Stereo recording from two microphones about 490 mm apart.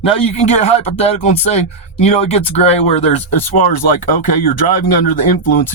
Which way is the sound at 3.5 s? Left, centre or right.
Left.